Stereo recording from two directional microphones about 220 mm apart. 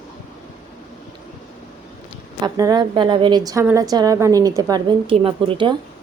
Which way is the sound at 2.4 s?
15° right (ahead or behind).